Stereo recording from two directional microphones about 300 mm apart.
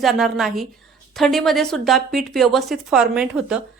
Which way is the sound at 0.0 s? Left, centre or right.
Centre.